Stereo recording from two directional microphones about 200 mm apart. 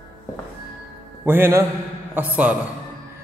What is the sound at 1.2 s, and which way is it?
A man's voice, 10° right (ahead or behind).